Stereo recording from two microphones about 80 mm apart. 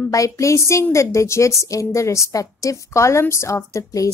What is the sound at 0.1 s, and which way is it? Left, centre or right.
A woman's voice, left.